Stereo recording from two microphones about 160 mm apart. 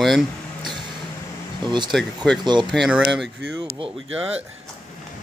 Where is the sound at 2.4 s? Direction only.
30° right (ahead or behind).